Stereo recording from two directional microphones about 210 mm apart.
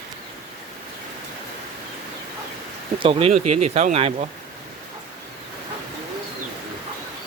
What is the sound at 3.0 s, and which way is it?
Speech, 25° right (ahead or behind).